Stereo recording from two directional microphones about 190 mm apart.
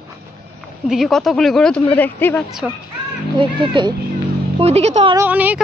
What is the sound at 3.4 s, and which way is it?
A woman's voice, 25° right (ahead or behind).